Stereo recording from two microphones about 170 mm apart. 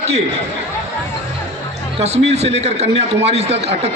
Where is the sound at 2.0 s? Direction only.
40° right (ahead or behind).